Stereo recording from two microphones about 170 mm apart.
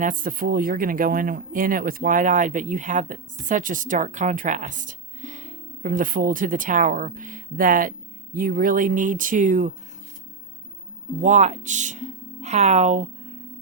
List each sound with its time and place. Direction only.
0.0 s speech: 55° right (ahead or behind)
11.2 s speech: 45° right (ahead or behind)